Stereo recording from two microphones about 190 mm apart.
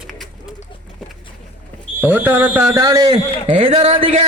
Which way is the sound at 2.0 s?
10° right (ahead or behind).